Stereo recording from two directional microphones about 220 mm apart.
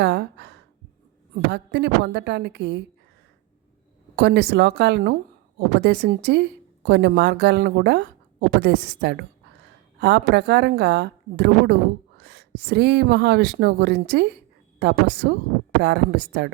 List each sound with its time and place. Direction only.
0.0 s gasp: 50° right (ahead or behind)
1.5 s a woman's voice: 50° right (ahead or behind)
4.1 s a woman's voice: 50° right (ahead or behind)